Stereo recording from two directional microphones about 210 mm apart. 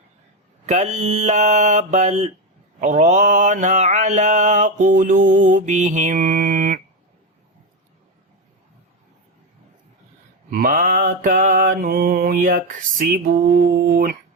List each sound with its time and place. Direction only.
0.6 s mantra: 30° right (ahead or behind)
10.5 s mantra: 40° right (ahead or behind)